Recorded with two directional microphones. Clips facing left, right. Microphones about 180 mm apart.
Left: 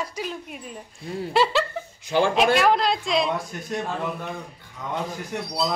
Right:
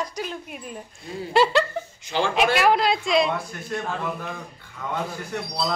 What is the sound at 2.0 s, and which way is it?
Speech, 50° left (ahead or behind).